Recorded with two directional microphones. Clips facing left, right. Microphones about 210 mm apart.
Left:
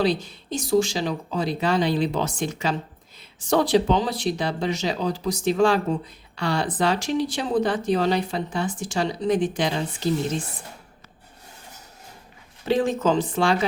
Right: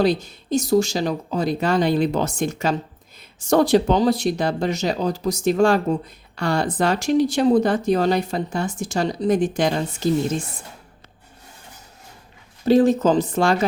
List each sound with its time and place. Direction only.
0.0 s speech: 45° right (ahead or behind)
12.6 s speech: 40° right (ahead or behind)